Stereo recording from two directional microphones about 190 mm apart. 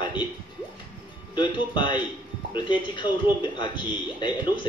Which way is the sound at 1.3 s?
25° left (ahead or behind).